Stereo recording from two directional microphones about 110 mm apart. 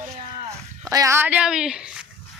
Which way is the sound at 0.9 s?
30° right (ahead or behind).